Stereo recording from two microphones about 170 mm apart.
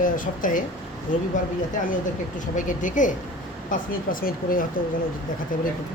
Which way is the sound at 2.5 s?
50° left (ahead or behind).